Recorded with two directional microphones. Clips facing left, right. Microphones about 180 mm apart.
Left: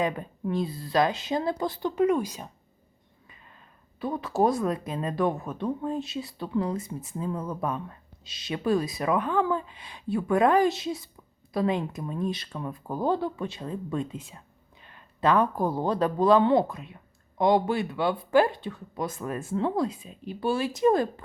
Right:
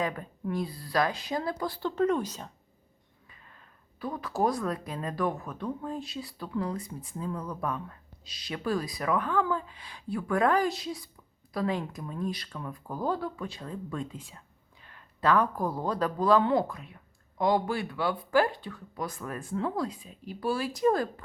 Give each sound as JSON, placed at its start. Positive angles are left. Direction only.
{"t": 0.0, "sound": "speech", "side_deg": 20}
{"t": 4.0, "sound": "speech", "side_deg": 25}